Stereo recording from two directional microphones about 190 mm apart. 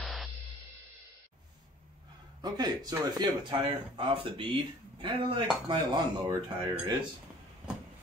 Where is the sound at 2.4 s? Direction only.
20° right (ahead or behind).